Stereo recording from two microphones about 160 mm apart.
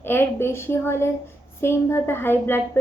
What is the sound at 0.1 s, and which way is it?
A woman's voice, 15° left (ahead or behind).